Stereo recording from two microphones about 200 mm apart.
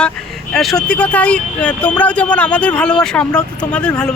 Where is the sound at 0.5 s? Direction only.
Centre (ahead or behind).